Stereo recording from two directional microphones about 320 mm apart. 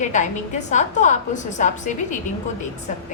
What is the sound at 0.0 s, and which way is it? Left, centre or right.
A woman's voice, left.